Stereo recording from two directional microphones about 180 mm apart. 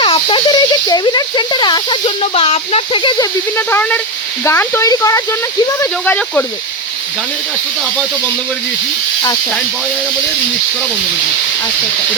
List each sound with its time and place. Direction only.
0.0 s speech: 30° left (ahead or behind)
3.7 s speech: 10° left (ahead or behind)